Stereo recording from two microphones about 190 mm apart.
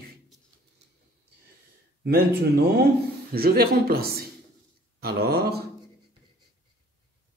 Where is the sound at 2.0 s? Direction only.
55° right (ahead or behind).